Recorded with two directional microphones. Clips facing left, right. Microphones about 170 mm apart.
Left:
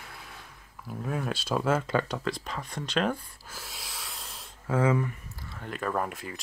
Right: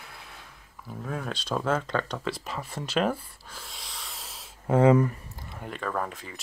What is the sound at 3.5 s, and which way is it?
Snort, 5° left (ahead or behind).